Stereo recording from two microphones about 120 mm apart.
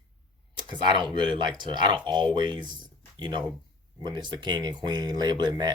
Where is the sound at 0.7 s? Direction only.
40° right (ahead or behind).